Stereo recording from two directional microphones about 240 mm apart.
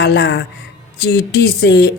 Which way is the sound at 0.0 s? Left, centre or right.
Left.